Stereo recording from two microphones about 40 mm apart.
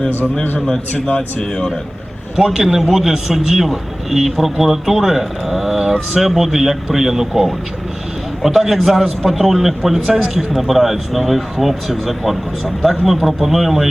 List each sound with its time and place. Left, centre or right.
0.9 s speech: left
1.4 s speech: centre
2.3 s a man's voice: centre